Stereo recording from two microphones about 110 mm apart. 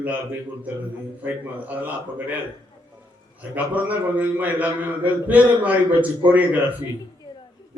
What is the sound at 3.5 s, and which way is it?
A man's voice, 15° right (ahead or behind).